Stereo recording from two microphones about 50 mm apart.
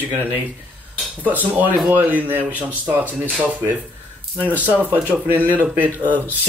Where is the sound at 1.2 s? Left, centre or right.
Right.